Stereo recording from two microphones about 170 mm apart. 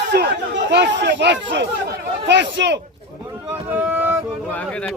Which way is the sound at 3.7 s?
10° right (ahead or behind).